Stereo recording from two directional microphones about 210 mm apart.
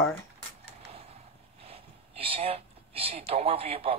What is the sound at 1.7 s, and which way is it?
Speech, 25° right (ahead or behind).